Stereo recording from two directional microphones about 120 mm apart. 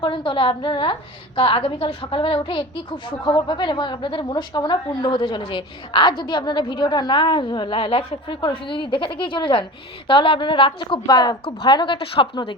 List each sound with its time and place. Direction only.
0.0 s a woman's voice: 45° left (ahead or behind)